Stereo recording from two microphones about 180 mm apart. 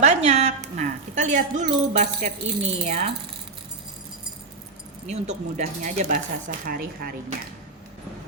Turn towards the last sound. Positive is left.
turn(degrees=-55)  # may be behind; listen again after turning